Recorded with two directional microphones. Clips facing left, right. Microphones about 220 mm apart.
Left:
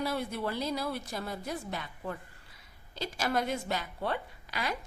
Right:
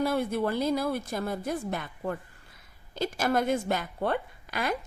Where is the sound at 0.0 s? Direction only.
50° right (ahead or behind).